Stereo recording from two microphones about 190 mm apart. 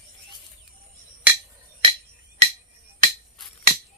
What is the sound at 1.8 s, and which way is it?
Finger snapping, 25° right (ahead or behind).